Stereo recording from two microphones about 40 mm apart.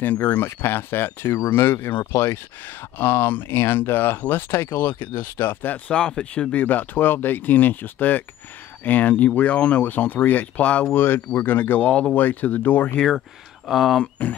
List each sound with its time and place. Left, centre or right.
0.0 s speech: left
3.0 s speech: left
5.9 s speech: centre
6.5 s speech: left
10.9 s speech: left
13.7 s speech: centre